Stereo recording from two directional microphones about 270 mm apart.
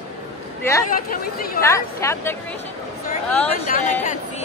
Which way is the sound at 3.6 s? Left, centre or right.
Left.